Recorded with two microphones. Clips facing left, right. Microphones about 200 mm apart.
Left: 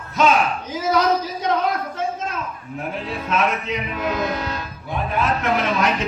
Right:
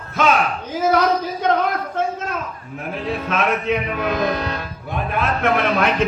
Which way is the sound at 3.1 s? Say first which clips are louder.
Right 1 dB; 55° right (ahead or behind).